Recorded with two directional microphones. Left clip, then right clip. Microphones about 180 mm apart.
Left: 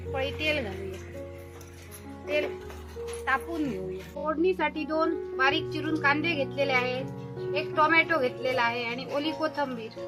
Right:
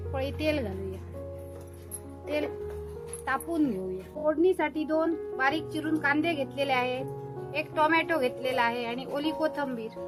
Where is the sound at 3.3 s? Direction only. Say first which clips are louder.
Left 3 dB; 70° right (ahead or behind).